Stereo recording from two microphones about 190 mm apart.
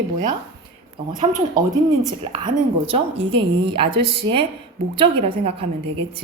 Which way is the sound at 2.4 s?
30° right (ahead or behind).